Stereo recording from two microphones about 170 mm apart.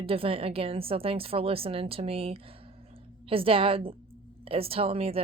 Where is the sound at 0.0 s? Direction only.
35° right (ahead or behind).